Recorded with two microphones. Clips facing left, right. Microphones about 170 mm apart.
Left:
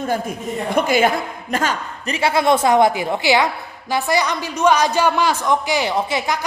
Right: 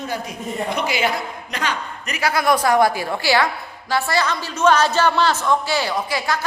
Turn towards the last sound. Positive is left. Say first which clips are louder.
# left 2 dB
turn(degrees=20)  # may be behind; listen again after turning